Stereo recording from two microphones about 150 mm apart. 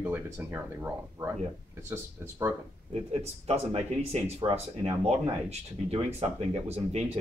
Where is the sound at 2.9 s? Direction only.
45° right (ahead or behind).